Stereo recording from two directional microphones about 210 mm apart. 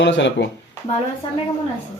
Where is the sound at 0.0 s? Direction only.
60° left (ahead or behind).